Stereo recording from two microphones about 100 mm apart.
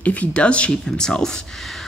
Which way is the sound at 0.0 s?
15° left (ahead or behind).